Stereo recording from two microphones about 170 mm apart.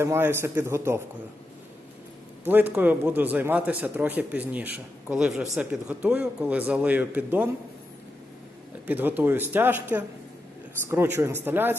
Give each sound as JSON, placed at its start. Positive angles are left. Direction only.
{"t": 0.0, "sound": "speech", "side_deg": -15}
{"t": 2.4, "sound": "speech", "side_deg": -10}
{"t": 8.9, "sound": "speech", "side_deg": -10}